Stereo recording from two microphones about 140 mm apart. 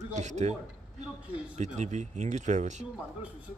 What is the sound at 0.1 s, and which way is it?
Speech, 55° right (ahead or behind).